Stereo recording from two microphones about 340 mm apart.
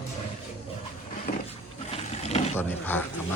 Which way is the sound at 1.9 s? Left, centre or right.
Centre.